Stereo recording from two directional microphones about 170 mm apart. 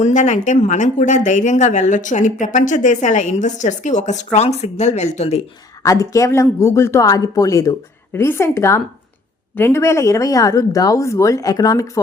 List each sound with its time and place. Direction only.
0.0 s speech: 45° left (ahead or behind)
5.8 s speech: 20° left (ahead or behind)